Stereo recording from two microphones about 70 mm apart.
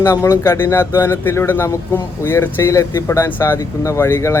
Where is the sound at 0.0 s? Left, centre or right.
Left.